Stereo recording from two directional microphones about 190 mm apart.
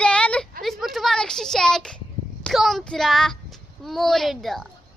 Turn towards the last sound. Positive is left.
turn(degrees=0)  # may be behind; listen again after turning